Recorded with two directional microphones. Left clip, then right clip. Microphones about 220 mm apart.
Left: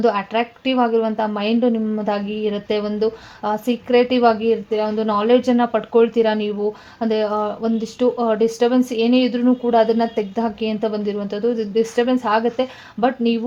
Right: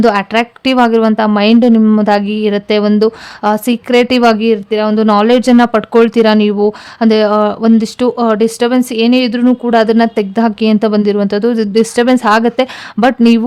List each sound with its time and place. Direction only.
0.0 s speech: 35° right (ahead or behind)